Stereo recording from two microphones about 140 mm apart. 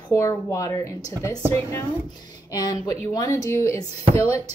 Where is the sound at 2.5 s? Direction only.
25° left (ahead or behind).